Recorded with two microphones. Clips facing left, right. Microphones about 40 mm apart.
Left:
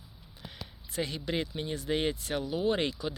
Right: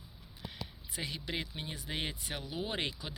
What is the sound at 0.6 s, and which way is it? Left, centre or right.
Speech, centre.